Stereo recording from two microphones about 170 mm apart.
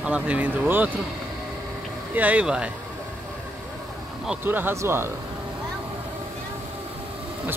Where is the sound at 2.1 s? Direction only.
10° right (ahead or behind).